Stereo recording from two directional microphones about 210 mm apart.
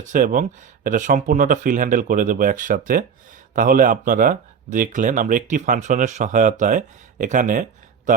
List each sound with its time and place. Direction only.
0.0 s speech: 40° right (ahead or behind)